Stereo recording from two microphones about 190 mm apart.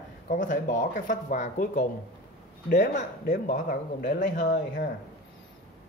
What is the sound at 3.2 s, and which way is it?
Speech, 45° left (ahead or behind).